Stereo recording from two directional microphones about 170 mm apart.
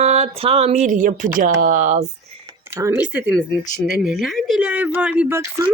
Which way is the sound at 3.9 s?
Centre (ahead or behind).